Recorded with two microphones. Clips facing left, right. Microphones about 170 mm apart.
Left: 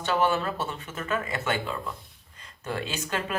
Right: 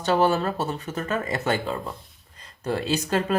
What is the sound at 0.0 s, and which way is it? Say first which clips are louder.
Speech: right 4 dB; 40° right (ahead or behind).